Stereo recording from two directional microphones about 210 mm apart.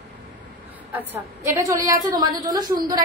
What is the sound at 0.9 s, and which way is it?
A woman's voice, 10° right (ahead or behind).